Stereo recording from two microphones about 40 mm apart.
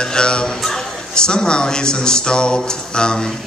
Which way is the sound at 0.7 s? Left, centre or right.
Centre.